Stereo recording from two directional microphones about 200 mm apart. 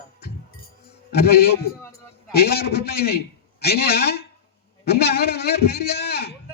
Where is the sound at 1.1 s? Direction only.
50° left (ahead or behind).